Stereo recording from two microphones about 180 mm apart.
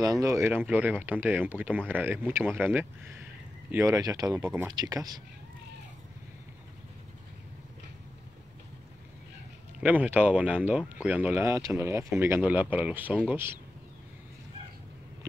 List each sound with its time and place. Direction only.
0.0 s speech: 20° right (ahead or behind)
4.4 s speech: 10° right (ahead or behind)
4.7 s speech: 20° right (ahead or behind)
9.8 s speech: 10° right (ahead or behind)